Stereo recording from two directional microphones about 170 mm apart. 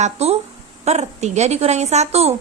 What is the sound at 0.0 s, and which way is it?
A woman's voice, 40° right (ahead or behind).